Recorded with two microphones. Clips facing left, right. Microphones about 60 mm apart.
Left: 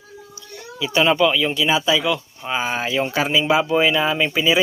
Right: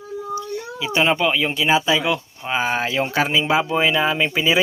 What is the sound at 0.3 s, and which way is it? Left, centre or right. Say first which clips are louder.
Speech: even; right.